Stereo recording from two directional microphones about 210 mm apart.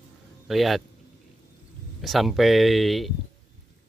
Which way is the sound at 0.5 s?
Centre (ahead or behind).